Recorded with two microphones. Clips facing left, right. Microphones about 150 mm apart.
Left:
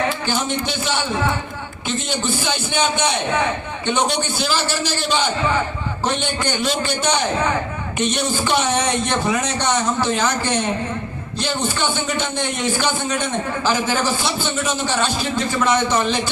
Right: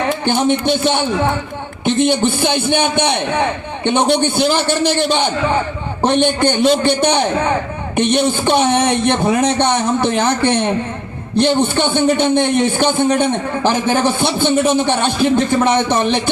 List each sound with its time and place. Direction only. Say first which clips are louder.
0.1 s a man's voice: right 7 dB; 55° right (ahead or behind)